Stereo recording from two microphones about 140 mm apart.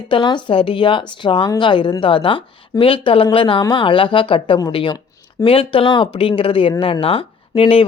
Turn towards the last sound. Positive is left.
turn(degrees=40)  # may be behind; listen again after turning